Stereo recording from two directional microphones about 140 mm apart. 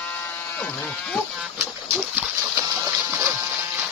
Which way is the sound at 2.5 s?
15° right (ahead or behind).